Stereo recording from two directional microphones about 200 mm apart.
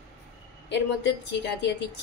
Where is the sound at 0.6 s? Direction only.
60° left (ahead or behind).